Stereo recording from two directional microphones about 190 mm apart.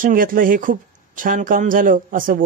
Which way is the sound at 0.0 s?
45° right (ahead or behind).